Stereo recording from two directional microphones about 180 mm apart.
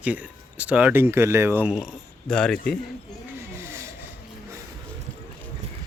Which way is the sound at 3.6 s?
15° right (ahead or behind).